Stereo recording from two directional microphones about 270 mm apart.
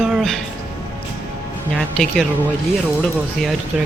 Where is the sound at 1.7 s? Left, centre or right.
Centre.